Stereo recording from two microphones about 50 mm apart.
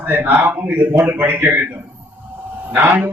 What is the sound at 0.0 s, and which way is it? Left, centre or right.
A man's voice, right.